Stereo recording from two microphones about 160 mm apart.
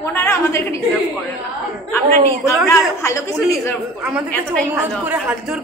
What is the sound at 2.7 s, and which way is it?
A man's voice, 20° left (ahead or behind).